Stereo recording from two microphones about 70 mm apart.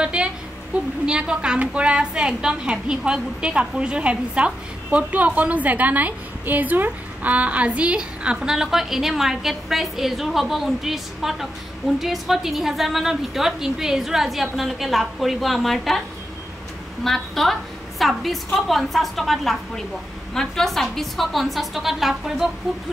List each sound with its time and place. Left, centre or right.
0.0 s a sound: centre
1.0 s a woman's voice: centre
17.0 s a woman's voice: centre